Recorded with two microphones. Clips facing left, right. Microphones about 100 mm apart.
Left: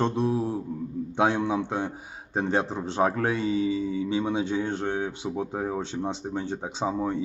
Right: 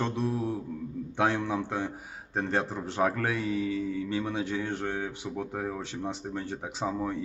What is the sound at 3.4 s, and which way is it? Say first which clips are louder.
Speech: left 4 dB; centre (ahead or behind).